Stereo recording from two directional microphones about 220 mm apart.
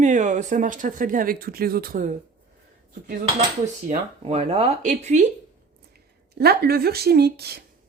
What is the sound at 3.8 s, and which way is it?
Speech, 30° right (ahead or behind).